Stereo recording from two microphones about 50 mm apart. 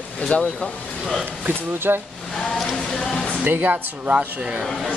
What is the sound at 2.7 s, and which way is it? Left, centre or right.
Music, centre.